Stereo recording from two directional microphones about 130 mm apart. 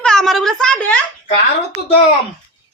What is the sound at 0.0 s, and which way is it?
Speech, 5° left (ahead or behind).